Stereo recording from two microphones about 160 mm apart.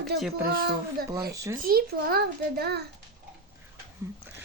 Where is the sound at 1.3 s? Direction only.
20° right (ahead or behind).